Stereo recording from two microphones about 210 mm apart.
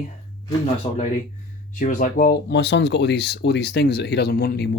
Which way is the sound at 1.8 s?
40° left (ahead or behind).